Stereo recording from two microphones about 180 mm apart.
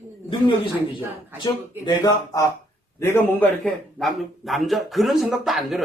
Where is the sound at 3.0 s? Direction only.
15° left (ahead or behind).